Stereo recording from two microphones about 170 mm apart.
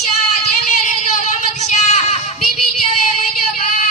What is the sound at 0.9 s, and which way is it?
Child singing, 45° left (ahead or behind).